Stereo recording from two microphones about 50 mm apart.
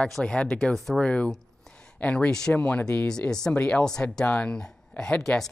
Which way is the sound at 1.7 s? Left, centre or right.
Left.